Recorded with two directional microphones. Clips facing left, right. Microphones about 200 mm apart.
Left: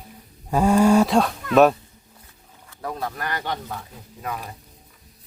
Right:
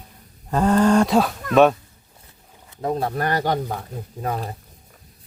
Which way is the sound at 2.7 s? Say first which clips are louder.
Right 6 dB; 25° right (ahead or behind).